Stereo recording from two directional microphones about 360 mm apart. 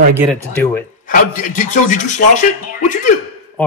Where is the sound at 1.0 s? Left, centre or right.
Left.